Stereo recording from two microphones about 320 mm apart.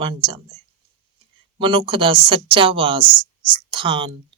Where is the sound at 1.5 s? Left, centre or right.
Centre.